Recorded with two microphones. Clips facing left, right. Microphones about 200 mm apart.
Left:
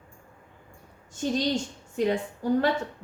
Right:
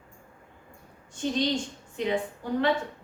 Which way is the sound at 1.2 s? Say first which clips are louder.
Left 1 dB; 40° left (ahead or behind).